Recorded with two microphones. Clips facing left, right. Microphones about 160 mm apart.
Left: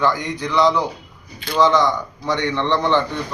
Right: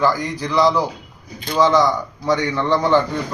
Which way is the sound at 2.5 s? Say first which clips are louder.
Right 1 dB; 10° right (ahead or behind).